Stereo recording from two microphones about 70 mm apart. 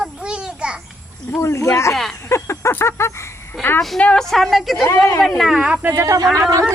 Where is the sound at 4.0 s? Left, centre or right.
Centre.